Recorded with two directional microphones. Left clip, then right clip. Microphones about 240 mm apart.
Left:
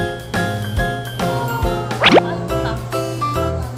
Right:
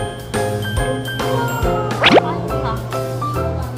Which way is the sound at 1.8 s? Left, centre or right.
Centre.